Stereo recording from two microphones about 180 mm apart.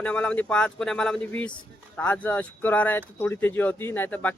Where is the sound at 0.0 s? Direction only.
5° left (ahead or behind).